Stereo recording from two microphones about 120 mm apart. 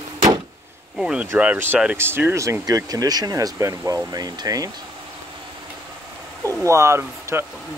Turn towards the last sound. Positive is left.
turn(degrees=-20)  # may be behind; listen again after turning